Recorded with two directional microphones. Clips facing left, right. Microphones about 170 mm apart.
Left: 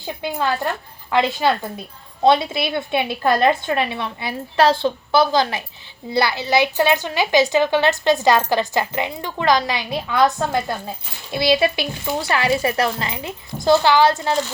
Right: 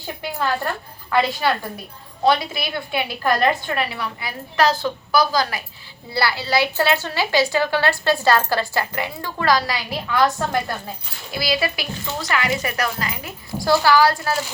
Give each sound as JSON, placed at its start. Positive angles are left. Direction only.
{"t": 0.2, "sound": "a woman's voice", "side_deg": 20}